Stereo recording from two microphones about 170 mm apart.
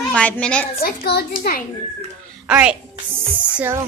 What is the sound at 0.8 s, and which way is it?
Speech, 65° left (ahead or behind).